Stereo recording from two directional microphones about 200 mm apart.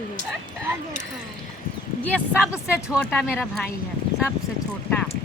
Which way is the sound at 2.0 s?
5° left (ahead or behind).